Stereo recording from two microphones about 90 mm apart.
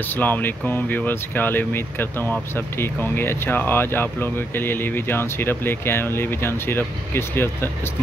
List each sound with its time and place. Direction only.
0.1 s speech: 20° left (ahead or behind)